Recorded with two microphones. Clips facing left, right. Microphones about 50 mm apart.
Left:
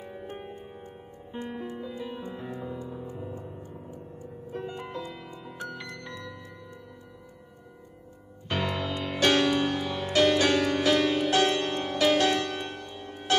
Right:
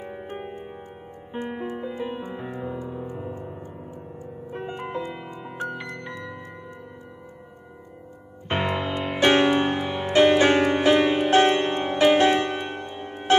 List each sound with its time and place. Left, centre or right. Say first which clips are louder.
0.0 s music: right 5 dB; right
8.5 s music: right 5 dB; right